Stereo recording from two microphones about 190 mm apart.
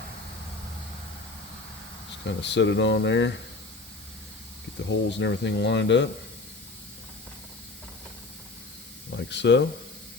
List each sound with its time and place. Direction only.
2.2 s speech: 70° left (ahead or behind)
4.9 s speech: 70° left (ahead or behind)
9.0 s speech: 65° left (ahead or behind)